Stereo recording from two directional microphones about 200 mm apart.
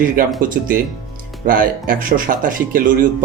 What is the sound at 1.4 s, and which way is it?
Speech, 45° right (ahead or behind).